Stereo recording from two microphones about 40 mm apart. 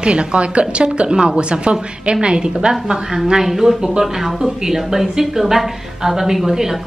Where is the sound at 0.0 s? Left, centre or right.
Right.